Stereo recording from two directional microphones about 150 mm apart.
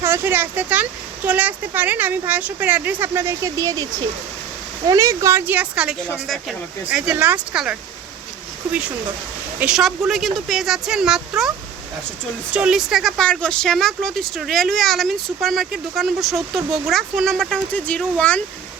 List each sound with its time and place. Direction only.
0.0 s speech: 15° right (ahead or behind)
4.9 s speech: 20° right (ahead or behind); by 7.8 s 5° right (ahead or behind)
9.6 s speech: 5° right (ahead or behind)
12.5 s speech: 5° right (ahead or behind)